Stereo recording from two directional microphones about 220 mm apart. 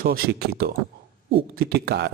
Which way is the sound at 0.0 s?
40° right (ahead or behind).